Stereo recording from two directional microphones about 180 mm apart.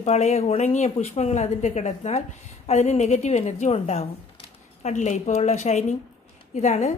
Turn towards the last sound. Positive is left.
turn(degrees=40)  # may be behind; listen again after turning